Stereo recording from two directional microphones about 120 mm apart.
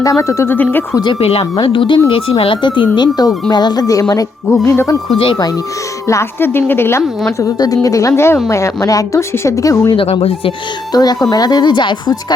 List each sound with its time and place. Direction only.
0.0 s speech: 25° left (ahead or behind)
1.2 s speech: 55° left (ahead or behind); by 4.0 s 30° left (ahead or behind)
4.6 s speech: 20° left (ahead or behind)
5.1 s speech: 50° left (ahead or behind)
6.1 s speech: 20° left (ahead or behind)
9.9 s speech: 45° left (ahead or behind)
10.9 s speech: 35° left (ahead or behind)